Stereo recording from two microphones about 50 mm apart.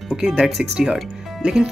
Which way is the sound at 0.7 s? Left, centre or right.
Centre.